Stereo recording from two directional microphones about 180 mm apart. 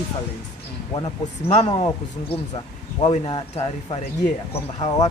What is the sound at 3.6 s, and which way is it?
Speech, 35° left (ahead or behind).